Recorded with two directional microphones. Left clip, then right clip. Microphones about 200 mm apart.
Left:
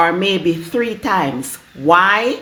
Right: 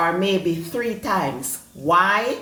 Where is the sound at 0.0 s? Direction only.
50° left (ahead or behind).